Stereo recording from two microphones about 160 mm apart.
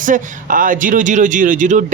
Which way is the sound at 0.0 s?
55° right (ahead or behind).